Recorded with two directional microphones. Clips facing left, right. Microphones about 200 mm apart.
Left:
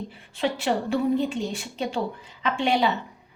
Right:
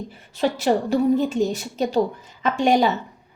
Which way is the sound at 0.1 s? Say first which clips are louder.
Right 5 dB; 40° right (ahead or behind).